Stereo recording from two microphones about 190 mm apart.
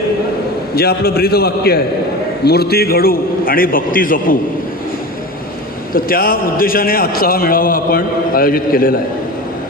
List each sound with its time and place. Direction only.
0.7 s a man's voice: 55° left (ahead or behind)
5.9 s a man's voice: 50° left (ahead or behind)